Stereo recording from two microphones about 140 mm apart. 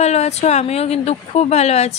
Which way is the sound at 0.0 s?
50° left (ahead or behind).